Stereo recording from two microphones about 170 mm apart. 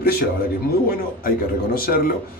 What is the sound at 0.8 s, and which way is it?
Speech, 60° left (ahead or behind).